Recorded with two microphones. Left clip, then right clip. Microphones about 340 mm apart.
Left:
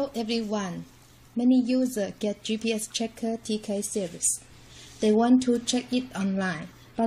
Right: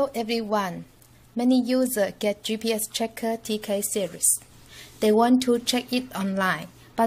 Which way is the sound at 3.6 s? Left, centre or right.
Right.